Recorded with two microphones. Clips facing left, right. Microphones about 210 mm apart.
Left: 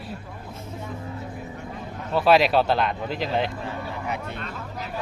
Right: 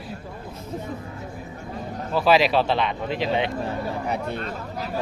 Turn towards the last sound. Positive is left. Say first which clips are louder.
# right 4 dB
turn(degrees=-35)  # may be behind; listen again after turning